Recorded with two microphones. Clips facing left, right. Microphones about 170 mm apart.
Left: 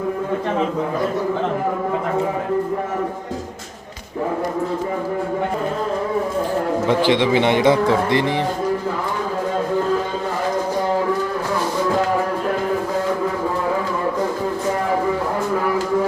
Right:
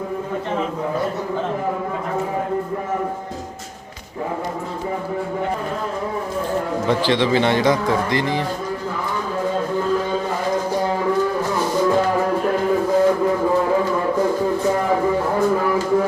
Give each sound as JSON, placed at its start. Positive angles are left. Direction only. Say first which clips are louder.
{"t": 6.8, "sound": "a man's voice", "louder": "left 2 dB", "side_deg": 15}